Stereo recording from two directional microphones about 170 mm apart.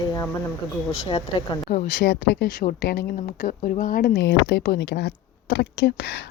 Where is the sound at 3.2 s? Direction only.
50° left (ahead or behind).